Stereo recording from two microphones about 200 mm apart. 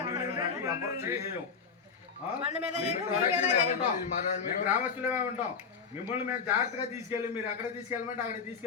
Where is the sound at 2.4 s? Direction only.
30° right (ahead or behind).